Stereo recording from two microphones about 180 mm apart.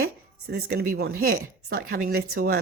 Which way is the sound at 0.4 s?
60° right (ahead or behind).